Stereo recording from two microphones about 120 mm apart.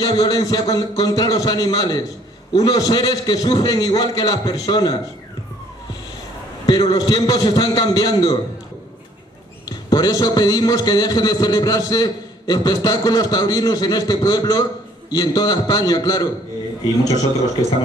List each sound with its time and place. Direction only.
0.0 s a man's voice: 30° left (ahead or behind)
6.6 s a man's voice: 35° left (ahead or behind)
9.7 s a man's voice: 30° left (ahead or behind)